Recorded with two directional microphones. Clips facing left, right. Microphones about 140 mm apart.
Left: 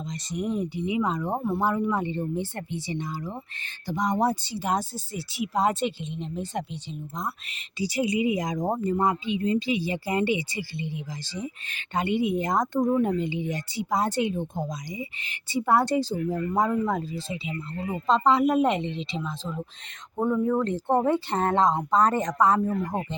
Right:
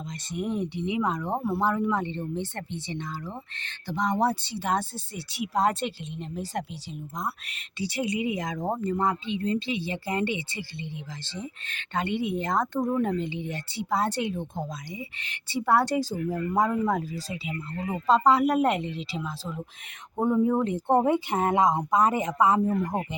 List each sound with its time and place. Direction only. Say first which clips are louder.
0.1 s speech: left 1 dB; 5° right (ahead or behind)
7.8 s speech: left 3 dB; centre (ahead or behind); by 18.1 s 20° right (ahead or behind)
18.1 s speech: even; 5° right (ahead or behind)
20.1 s speech: right 1 dB; 20° right (ahead or behind)